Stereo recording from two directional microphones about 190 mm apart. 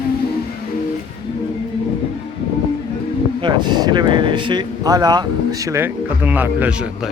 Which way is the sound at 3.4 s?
25° right (ahead or behind).